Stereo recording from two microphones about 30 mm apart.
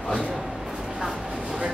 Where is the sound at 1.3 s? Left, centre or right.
Right.